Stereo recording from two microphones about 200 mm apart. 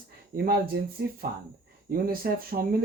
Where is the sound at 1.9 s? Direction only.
50° right (ahead or behind).